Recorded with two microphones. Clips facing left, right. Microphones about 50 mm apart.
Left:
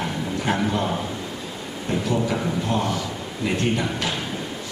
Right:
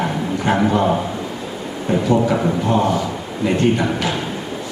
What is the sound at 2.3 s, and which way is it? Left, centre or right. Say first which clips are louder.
Speech: right 6 dB; right.